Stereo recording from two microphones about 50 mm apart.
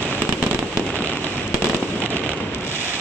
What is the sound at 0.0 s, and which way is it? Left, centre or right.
Fireworks, left.